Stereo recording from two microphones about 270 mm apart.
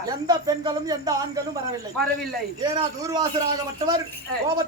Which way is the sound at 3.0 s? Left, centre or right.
Centre.